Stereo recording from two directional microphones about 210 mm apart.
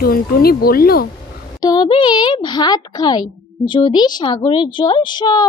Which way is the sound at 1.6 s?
20° left (ahead or behind).